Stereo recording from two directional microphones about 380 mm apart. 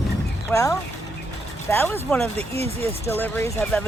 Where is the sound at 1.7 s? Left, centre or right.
Centre.